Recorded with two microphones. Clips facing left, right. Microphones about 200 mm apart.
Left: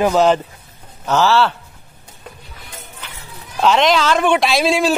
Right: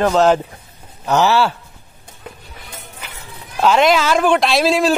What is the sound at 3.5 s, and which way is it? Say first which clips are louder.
A man's voice: right 1 dB; 5° right (ahead or behind).